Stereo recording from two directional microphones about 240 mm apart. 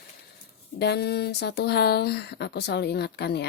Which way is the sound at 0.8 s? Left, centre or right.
Left.